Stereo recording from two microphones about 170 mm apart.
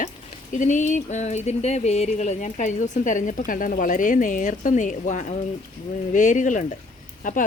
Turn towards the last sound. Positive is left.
turn(degrees=50)  # may be behind; listen again after turning